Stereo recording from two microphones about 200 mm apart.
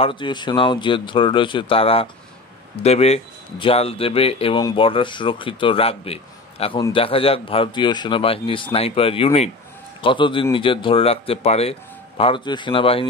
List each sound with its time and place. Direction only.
0.0 s speech: 25° left (ahead or behind)